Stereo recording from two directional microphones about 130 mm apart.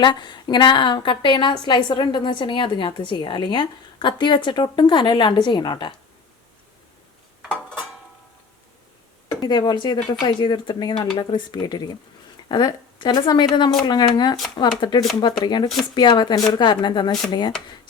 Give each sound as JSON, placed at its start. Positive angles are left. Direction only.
{"t": 0.0, "sound": "a woman's voice", "side_deg": 35}
{"t": 9.4, "sound": "a woman's voice", "side_deg": 35}